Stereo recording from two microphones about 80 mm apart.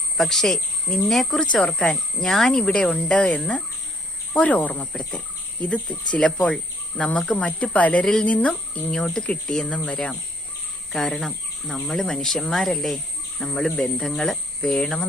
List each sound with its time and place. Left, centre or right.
0.2 s speech: centre
4.9 s speech: centre